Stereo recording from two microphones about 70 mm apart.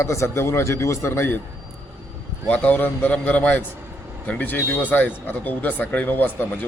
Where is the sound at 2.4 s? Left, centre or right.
Left.